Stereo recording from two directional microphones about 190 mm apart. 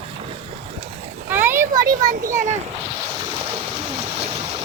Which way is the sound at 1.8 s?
45° right (ahead or behind).